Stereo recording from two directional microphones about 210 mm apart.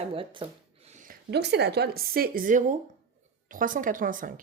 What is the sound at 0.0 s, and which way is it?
Speech, 25° right (ahead or behind).